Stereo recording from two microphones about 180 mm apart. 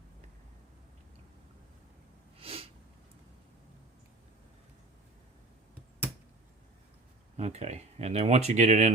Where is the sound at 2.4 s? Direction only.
30° right (ahead or behind).